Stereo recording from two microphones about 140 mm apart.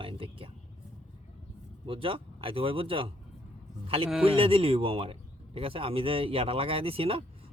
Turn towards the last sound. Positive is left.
turn(degrees=-40)  # may be behind; listen again after turning